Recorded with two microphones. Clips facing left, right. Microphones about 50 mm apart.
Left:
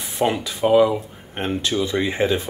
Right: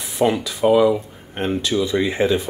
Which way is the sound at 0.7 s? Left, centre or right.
Centre.